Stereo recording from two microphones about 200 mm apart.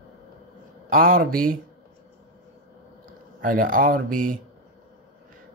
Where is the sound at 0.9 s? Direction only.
45° right (ahead or behind).